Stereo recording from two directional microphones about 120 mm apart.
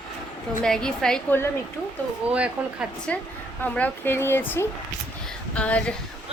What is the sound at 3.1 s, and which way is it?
A woman's voice, 10° left (ahead or behind).